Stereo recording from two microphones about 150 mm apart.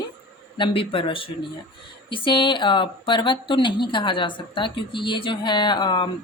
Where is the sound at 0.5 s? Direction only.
35° left (ahead or behind).